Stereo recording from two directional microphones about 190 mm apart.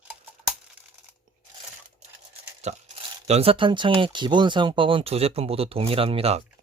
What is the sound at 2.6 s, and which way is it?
Speech, 35° right (ahead or behind).